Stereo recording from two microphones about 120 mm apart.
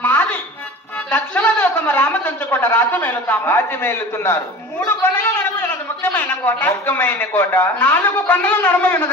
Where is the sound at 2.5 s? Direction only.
15° left (ahead or behind).